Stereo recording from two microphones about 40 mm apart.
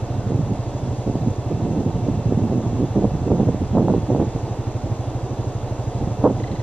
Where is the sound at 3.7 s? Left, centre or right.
Centre.